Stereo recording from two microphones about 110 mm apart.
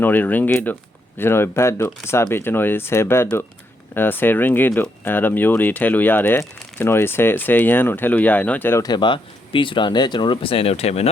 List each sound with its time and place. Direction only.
0.0 s speech: 15° left (ahead or behind)
8.8 s speech: 45° left (ahead or behind); by 11.1 s 70° left (ahead or behind)